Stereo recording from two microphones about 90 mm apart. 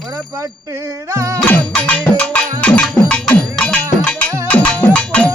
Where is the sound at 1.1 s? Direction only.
35° right (ahead or behind).